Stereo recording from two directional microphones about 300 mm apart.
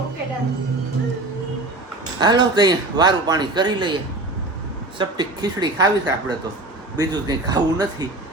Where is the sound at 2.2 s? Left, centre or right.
Centre.